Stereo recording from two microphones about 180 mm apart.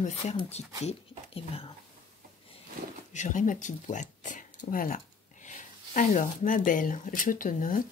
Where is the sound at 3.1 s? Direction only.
45° left (ahead or behind).